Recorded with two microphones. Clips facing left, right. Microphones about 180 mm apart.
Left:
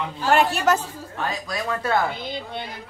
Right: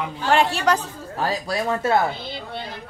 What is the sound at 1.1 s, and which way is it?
Speech, 30° right (ahead or behind).